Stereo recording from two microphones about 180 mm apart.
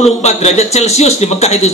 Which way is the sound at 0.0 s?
35° left (ahead or behind).